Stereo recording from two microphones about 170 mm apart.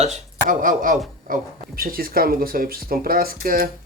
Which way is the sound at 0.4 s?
55° right (ahead or behind).